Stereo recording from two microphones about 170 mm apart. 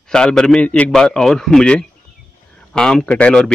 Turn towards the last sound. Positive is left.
turn(degrees=5)  # may be behind; listen again after turning